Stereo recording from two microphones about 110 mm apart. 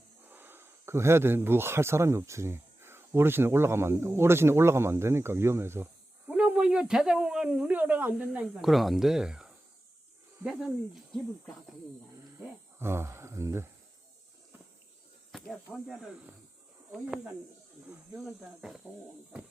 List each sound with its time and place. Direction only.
0.3 s speech: 20° right (ahead or behind)
12.8 s speech: 25° right (ahead or behind)
15.3 s speech: 5° left (ahead or behind)
18.1 s speech: 5° right (ahead or behind)